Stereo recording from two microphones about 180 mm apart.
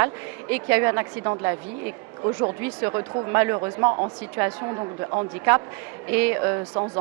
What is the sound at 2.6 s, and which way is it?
Speech, 15° right (ahead or behind).